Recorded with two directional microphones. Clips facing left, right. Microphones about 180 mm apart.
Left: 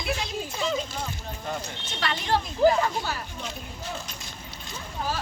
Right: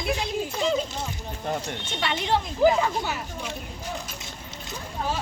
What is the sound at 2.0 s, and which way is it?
Speech, 20° right (ahead or behind).